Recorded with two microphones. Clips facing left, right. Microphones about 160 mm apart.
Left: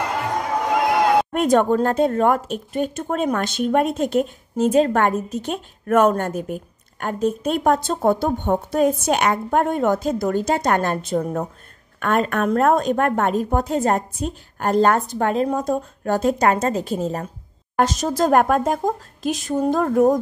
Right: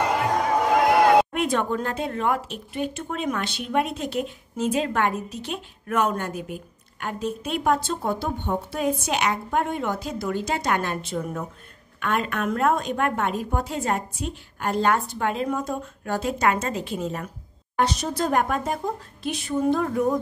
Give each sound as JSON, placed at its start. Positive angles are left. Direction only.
{"t": 1.3, "sound": "a woman's voice", "side_deg": 45}